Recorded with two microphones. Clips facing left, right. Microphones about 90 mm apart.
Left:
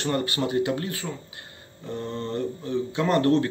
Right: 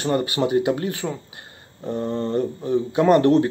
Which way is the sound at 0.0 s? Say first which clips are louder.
Right 5 dB; 20° right (ahead or behind).